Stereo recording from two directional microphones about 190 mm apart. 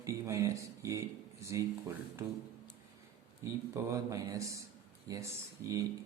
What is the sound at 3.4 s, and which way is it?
A man's voice, 15° right (ahead or behind).